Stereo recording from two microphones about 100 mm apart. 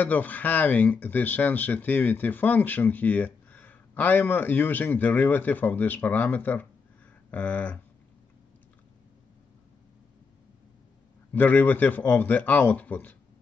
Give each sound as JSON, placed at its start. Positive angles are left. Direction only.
{"t": 0.0, "sound": "speech", "side_deg": 15}
{"t": 11.3, "sound": "speech", "side_deg": 15}